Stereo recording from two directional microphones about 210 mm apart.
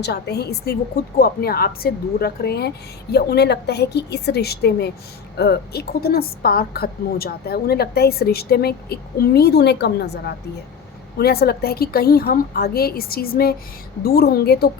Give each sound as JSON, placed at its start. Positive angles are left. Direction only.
{"t": 0.0, "sound": "a woman's voice", "side_deg": 50}